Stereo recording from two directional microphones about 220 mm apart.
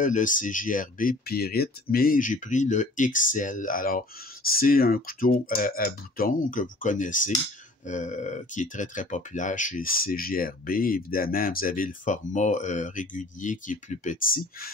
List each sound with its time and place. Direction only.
0.0 s speech: 35° left (ahead or behind)